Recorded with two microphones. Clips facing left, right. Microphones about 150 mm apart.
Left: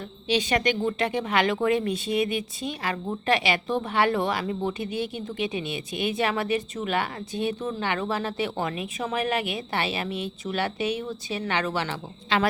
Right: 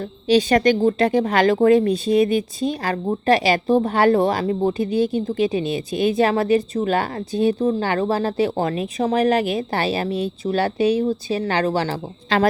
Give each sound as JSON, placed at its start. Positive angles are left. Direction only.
{"t": 0.3, "sound": "speech", "side_deg": -35}